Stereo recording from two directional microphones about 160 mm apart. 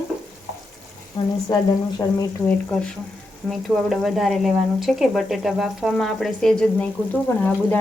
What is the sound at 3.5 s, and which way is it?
Speech, centre (ahead or behind).